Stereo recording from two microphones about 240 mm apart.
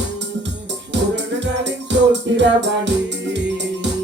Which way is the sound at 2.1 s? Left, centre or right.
Right.